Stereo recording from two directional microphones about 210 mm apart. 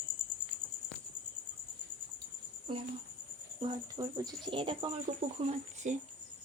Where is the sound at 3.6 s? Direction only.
20° right (ahead or behind).